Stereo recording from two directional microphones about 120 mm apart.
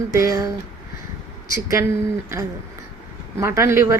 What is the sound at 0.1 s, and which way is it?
Speech, 30° right (ahead or behind).